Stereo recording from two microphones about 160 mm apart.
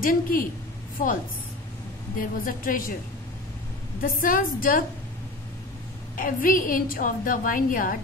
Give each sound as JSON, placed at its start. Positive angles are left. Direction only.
{"t": 0.0, "sound": "a woman's voice", "side_deg": 60}
{"t": 4.0, "sound": "a woman's voice", "side_deg": 60}
{"t": 6.1, "sound": "a woman's voice", "side_deg": 60}